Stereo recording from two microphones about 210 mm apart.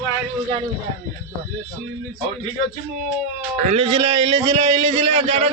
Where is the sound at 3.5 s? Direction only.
35° right (ahead or behind).